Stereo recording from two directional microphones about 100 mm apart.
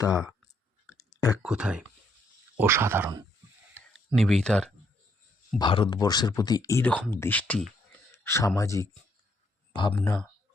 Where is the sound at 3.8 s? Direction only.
15° left (ahead or behind).